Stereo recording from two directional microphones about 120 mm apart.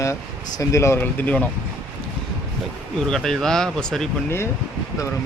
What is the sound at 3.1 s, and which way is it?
Speech, 5° left (ahead or behind).